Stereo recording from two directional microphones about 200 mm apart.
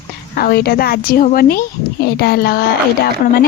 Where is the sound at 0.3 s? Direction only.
50° left (ahead or behind).